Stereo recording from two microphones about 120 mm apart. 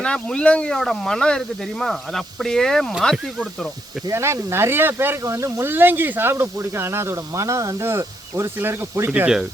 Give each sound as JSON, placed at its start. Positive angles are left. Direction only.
{"t": 0.0, "sound": "speech", "side_deg": 10}
{"t": 4.1, "sound": "speech", "side_deg": -20}